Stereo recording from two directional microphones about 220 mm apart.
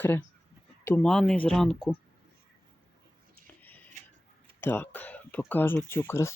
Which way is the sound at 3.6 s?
10° left (ahead or behind).